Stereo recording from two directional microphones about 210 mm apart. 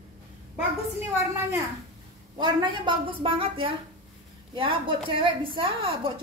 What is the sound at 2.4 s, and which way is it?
A woman's voice, 20° right (ahead or behind).